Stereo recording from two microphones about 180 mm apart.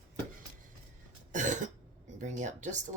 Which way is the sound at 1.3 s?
45° right (ahead or behind).